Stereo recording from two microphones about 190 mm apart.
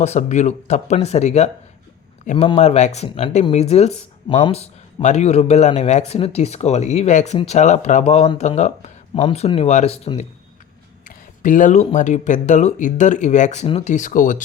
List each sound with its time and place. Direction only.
0.0 s speech: 35° left (ahead or behind)
11.1 s speech: 45° left (ahead or behind)